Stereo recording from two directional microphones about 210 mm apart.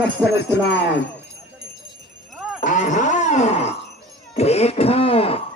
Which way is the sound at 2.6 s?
35° left (ahead or behind).